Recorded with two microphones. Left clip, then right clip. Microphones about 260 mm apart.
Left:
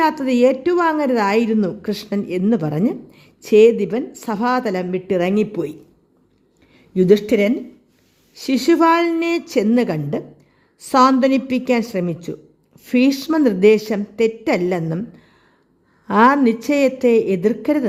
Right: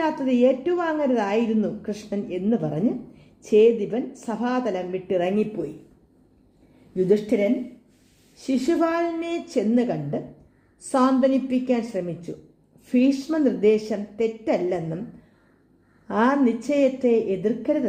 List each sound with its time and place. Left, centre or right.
0.0 s a woman's voice: left
6.9 s a woman's voice: left
16.0 s a woman's voice: left